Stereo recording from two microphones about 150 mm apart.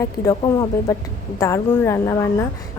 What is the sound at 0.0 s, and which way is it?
A woman's voice, 25° left (ahead or behind).